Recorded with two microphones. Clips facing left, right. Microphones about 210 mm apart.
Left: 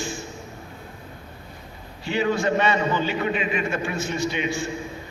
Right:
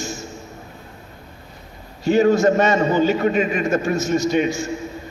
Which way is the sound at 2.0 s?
45° right (ahead or behind).